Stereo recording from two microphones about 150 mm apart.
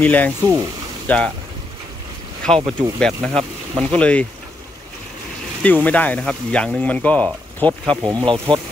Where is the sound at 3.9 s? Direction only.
10° left (ahead or behind).